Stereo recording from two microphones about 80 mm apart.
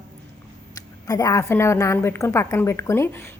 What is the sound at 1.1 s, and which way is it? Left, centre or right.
Speech, left.